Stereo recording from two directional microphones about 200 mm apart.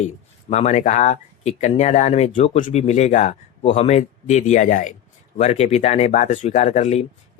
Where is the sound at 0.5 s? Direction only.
35° left (ahead or behind).